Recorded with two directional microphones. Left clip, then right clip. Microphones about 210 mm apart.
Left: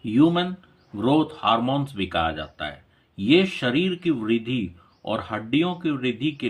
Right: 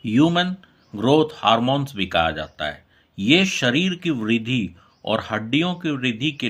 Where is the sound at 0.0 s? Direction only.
40° right (ahead or behind).